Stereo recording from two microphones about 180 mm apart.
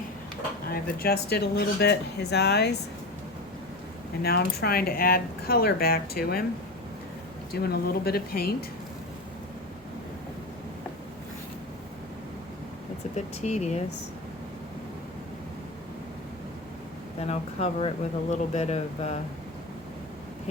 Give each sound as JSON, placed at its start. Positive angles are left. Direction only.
{"t": 0.7, "sound": "speech", "side_deg": 60}
{"t": 4.2, "sound": "speech", "side_deg": 60}
{"t": 7.5, "sound": "speech", "side_deg": 60}
{"t": 13.1, "sound": "speech", "side_deg": 40}
{"t": 17.2, "sound": "speech", "side_deg": 35}